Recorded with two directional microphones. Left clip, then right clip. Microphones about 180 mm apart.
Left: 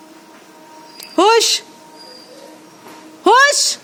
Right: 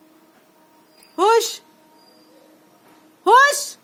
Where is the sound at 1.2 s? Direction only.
25° left (ahead or behind).